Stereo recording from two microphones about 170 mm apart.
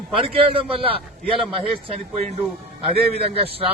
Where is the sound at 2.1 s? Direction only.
40° right (ahead or behind).